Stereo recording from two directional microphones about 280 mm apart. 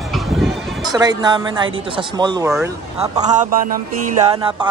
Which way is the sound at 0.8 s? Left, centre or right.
Centre.